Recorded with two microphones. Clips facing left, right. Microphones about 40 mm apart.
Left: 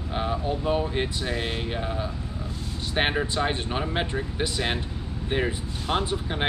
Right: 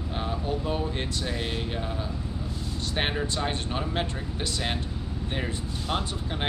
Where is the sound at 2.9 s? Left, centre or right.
Centre.